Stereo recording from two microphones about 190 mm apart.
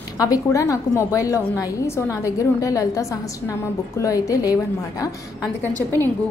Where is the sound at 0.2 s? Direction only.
20° left (ahead or behind).